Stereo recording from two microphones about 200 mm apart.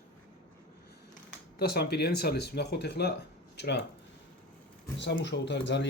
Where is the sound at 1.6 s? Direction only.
55° left (ahead or behind).